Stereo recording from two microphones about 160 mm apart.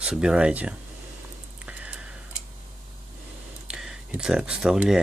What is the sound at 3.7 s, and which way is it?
Speech, 5° right (ahead or behind).